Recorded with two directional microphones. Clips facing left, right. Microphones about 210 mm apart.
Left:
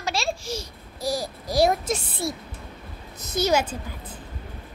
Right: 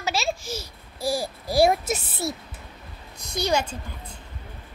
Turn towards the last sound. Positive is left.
turn(degrees=5)  # may be behind; listen again after turning